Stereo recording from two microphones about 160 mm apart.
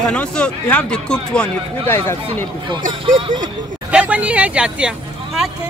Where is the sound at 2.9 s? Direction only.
30° right (ahead or behind).